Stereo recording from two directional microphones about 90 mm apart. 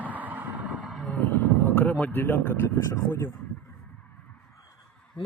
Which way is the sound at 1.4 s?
20° left (ahead or behind).